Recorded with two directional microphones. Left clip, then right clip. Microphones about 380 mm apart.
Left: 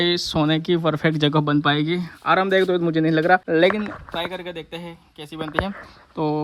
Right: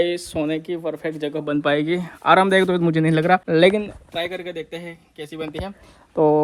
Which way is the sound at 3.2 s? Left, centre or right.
Right.